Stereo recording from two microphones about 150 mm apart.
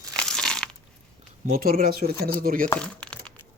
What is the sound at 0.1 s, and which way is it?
Crunch, 5° left (ahead or behind).